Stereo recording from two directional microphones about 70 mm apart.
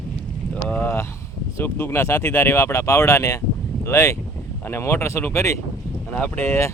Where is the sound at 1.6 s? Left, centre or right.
Left.